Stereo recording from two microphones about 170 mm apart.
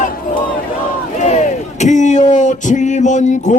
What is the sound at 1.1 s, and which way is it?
Speech, 45° left (ahead or behind).